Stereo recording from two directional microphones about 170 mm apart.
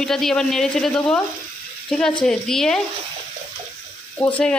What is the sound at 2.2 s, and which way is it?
Speech, 5° left (ahead or behind).